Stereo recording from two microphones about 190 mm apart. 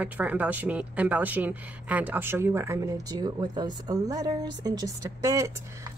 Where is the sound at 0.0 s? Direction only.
10° right (ahead or behind).